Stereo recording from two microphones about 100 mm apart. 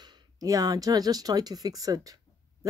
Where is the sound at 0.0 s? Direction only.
40° right (ahead or behind).